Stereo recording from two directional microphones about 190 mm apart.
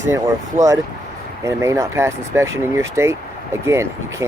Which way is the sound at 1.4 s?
15° right (ahead or behind).